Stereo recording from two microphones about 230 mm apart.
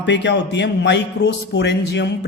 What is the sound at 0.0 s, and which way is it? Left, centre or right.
Speech, left.